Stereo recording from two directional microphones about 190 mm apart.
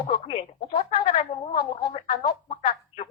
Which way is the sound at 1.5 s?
30° left (ahead or behind).